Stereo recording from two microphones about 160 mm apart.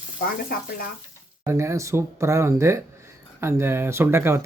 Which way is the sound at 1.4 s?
15° right (ahead or behind).